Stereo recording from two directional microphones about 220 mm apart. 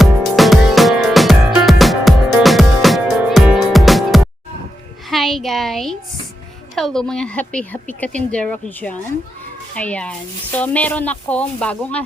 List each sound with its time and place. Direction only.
0.0 s music: centre (ahead or behind)
5.0 s a woman's voice: centre (ahead or behind)